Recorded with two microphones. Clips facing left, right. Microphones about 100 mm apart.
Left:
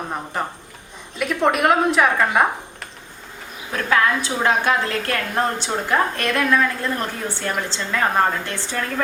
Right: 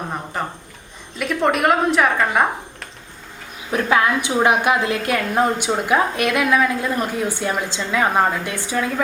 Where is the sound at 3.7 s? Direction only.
20° right (ahead or behind).